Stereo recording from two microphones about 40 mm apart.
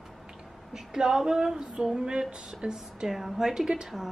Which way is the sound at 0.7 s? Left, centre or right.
Centre.